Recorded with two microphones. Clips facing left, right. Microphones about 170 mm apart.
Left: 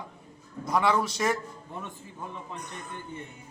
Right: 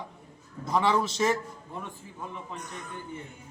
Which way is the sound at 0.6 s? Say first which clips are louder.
Even; 25° right (ahead or behind).